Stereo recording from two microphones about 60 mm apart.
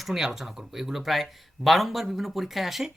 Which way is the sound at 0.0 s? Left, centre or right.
Centre.